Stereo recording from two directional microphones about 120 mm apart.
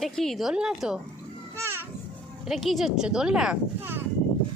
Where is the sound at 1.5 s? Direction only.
20° right (ahead or behind).